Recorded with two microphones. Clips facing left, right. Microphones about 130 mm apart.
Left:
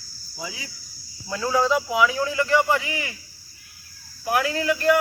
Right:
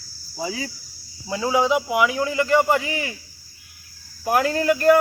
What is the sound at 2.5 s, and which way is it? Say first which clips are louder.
Cricket: right 3 dB; 40° right (ahead or behind).